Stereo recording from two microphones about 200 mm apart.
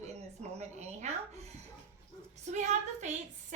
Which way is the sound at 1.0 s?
35° right (ahead or behind).